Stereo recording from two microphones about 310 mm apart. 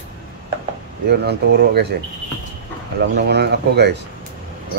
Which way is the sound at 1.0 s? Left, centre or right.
Right.